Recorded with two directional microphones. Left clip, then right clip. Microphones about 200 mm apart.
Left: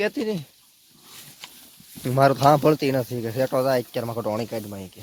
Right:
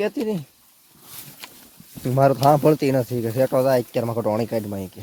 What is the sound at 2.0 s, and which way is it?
Speech, 5° left (ahead or behind).